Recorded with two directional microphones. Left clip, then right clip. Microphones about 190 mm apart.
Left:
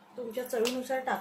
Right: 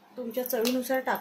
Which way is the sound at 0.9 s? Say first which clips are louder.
Right 4 dB; 45° right (ahead or behind).